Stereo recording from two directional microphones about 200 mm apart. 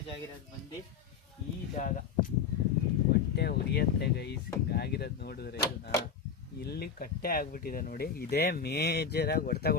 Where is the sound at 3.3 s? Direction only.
55° left (ahead or behind).